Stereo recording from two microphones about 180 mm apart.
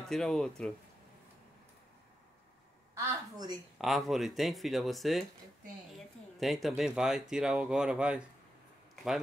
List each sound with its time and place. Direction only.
0.1 s speech: centre (ahead or behind)
2.9 s a woman's voice: 20° right (ahead or behind)
3.7 s speech: centre (ahead or behind)